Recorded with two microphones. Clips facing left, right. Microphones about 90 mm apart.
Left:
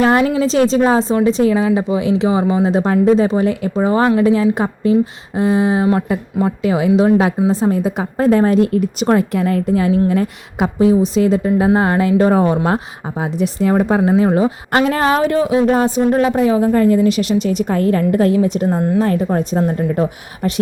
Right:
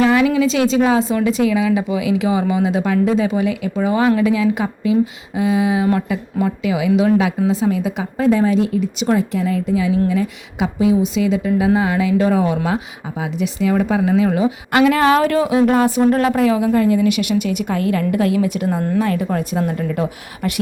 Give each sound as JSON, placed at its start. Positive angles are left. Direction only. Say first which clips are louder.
{"t": 0.0, "sound": "speech", "louder": "left 1 dB", "side_deg": 45}